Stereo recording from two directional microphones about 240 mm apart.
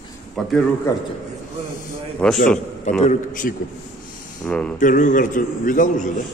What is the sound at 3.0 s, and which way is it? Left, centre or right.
Speech, left.